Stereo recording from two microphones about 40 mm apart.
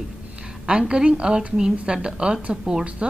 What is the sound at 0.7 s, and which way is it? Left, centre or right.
A woman's voice, right.